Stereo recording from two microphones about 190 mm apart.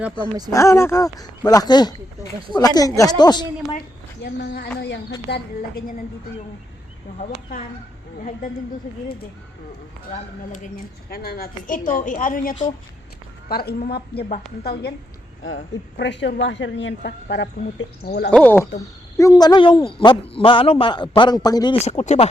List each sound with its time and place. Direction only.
0.5 s a man's voice: 15° left (ahead or behind)
3.8 s a woman's voice: 55° left (ahead or behind)
10.5 s a woman's voice: 45° left (ahead or behind)
13.5 s a woman's voice: 55° left (ahead or behind)
15.4 s a woman's voice: 75° left (ahead or behind); by 18.3 s 60° left (ahead or behind)
18.3 s a man's voice: 10° left (ahead or behind)
21.8 s speech: 35° left (ahead or behind)